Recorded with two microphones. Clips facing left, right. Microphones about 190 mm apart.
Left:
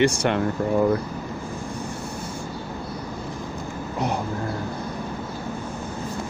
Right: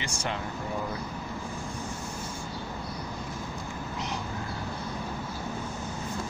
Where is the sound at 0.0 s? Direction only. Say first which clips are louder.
Left 13 dB; 65° left (ahead or behind).